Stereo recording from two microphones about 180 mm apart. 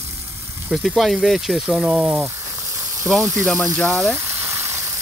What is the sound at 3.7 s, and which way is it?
Speech, 5° left (ahead or behind).